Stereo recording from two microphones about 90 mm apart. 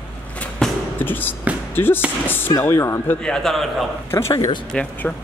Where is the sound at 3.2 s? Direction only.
5° left (ahead or behind).